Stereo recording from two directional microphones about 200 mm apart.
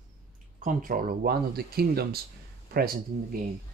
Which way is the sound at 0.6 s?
40° right (ahead or behind).